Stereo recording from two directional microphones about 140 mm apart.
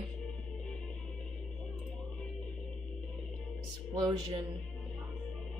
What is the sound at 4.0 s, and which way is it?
Speech, 30° right (ahead or behind).